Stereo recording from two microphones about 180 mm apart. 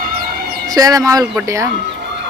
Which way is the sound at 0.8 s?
20° right (ahead or behind).